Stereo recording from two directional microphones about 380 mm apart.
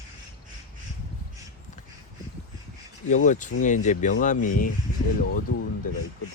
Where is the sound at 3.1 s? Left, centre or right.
Centre.